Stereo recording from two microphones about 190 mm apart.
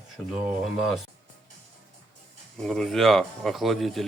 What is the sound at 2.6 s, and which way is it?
Speech, centre (ahead or behind).